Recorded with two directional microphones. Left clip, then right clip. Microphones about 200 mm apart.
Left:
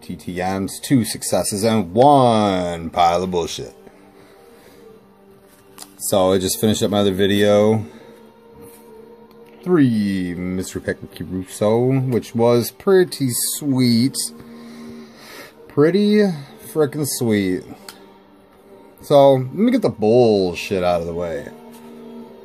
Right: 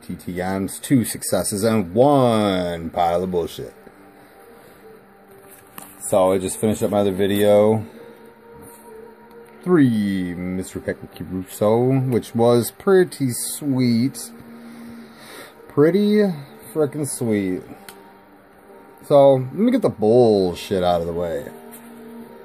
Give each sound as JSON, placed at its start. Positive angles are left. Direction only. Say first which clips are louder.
{"t": 0.0, "sound": "speech", "louder": "left 3 dB", "side_deg": -5}
{"t": 6.0, "sound": "speech", "louder": "left 1 dB", "side_deg": 30}
{"t": 9.7, "sound": "speech", "louder": "even", "side_deg": -10}
{"t": 11.5, "sound": "speech", "louder": "even", "side_deg": -5}
{"t": 15.2, "sound": "speech", "louder": "right 1 dB", "side_deg": -10}
{"t": 19.0, "sound": "speech", "louder": "left 1 dB", "side_deg": 5}